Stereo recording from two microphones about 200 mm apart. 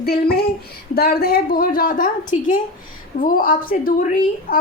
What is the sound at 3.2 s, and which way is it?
A woman's voice, 45° left (ahead or behind).